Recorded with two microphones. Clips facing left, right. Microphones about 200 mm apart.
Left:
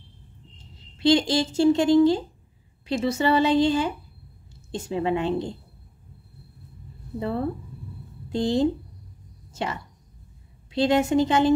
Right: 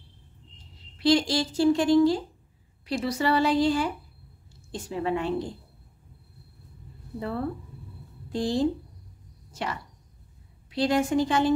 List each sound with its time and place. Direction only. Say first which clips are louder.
0.9 s a woman's voice: left 2 dB; 25° left (ahead or behind)
7.2 s a woman's voice: left 3 dB; 25° left (ahead or behind)